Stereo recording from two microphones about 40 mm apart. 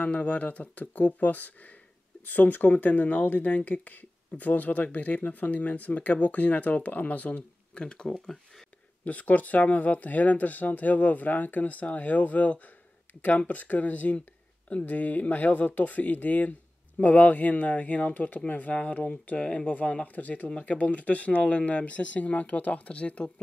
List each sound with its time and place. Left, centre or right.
0.0 s speech: left
7.8 s speech: left
9.0 s speech: left
19.3 s speech: left
19.6 s speech: left
20.4 s speech: left